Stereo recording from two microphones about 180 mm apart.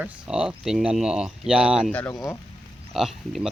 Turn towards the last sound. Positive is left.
turn(degrees=0)  # may be behind; listen again after turning